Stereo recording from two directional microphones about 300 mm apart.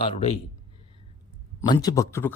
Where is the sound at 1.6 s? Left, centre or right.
Centre.